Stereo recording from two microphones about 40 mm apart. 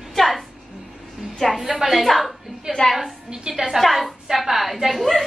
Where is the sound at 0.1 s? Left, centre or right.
Centre.